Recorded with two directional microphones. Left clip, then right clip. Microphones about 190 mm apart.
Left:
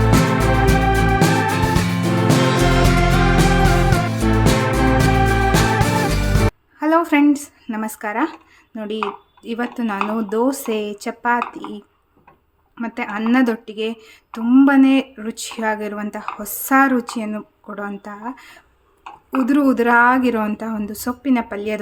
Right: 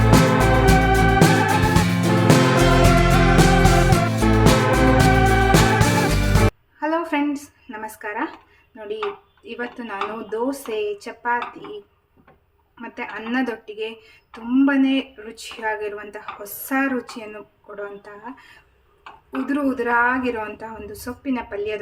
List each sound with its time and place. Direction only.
0.0 s music: centre (ahead or behind)
6.7 s a sound: 45° left (ahead or behind)
9.4 s speech: 50° left (ahead or behind)
12.8 s speech: 50° left (ahead or behind)
19.5 s speech: 50° left (ahead or behind)